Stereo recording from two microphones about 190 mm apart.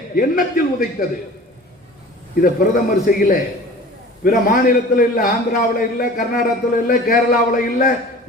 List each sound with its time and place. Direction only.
0.2 s speech: 50° left (ahead or behind)
2.3 s speech: 50° left (ahead or behind)